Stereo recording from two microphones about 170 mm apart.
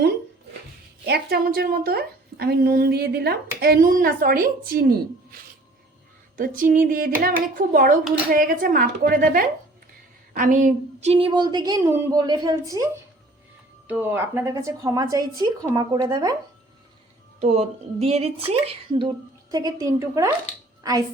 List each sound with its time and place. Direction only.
1.0 s a woman's voice: 70° right (ahead or behind)
6.3 s a sound: 55° right (ahead or behind)
7.2 s a woman's voice: 60° right (ahead or behind); by 16.3 s 20° right (ahead or behind)
17.4 s a woman's voice: 40° right (ahead or behind); by 20.3 s 15° right (ahead or behind)